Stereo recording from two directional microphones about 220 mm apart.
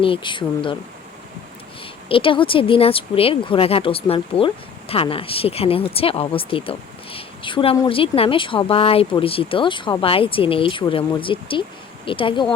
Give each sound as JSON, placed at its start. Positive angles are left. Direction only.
{"t": 0.0, "sound": "speech", "side_deg": 25}
{"t": 2.0, "sound": "speech", "side_deg": 25}